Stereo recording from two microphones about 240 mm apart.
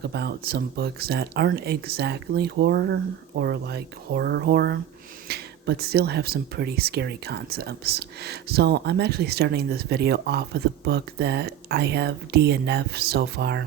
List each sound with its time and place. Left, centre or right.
0.1 s speech: right